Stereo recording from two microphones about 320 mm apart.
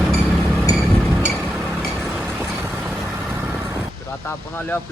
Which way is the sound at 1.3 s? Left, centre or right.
Centre.